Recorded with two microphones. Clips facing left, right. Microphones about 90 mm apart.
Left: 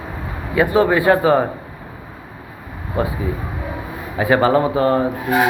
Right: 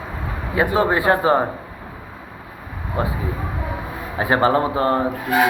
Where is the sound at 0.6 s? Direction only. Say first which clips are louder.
Left 3 dB; 30° right (ahead or behind).